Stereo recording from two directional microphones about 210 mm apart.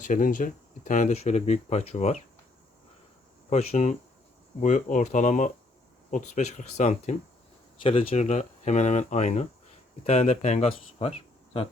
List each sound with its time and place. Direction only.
0.0 s speech: 40° left (ahead or behind)
3.5 s speech: 30° left (ahead or behind)